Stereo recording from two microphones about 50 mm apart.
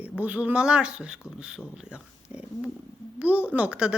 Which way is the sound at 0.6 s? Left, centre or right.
Centre.